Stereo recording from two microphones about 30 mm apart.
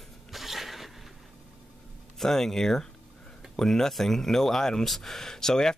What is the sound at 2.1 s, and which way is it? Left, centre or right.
Speech, centre.